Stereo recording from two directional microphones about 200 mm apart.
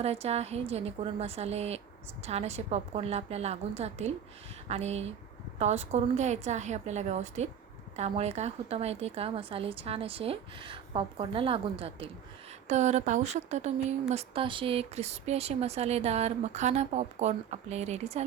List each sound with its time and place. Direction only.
0.0 s a woman's voice: 30° right (ahead or behind)